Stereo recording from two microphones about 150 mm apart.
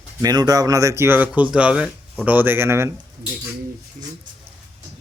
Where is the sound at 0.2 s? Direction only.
25° right (ahead or behind).